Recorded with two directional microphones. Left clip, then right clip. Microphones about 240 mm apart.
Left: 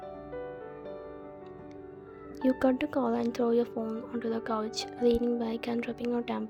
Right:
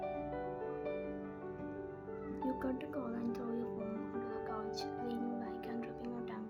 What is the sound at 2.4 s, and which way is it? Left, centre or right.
A woman's voice, left.